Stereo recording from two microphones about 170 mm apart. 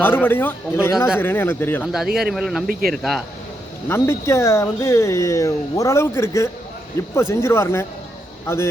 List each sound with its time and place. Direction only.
0.0 s speech: 10° left (ahead or behind)
1.8 s speech: 5° right (ahead or behind)
3.8 s speech: 15° left (ahead or behind)